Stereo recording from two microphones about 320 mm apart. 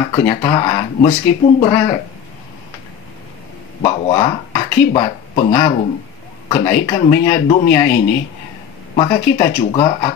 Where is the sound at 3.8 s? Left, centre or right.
Centre.